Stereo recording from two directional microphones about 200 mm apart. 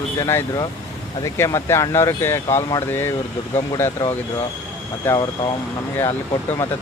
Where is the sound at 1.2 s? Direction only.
15° left (ahead or behind).